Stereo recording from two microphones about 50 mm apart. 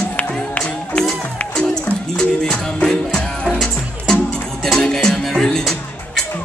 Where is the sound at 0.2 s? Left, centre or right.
Left.